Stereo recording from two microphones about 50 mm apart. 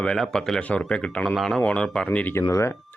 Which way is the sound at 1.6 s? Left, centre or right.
Centre.